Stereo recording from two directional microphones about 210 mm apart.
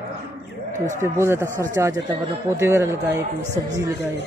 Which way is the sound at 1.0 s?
15° right (ahead or behind).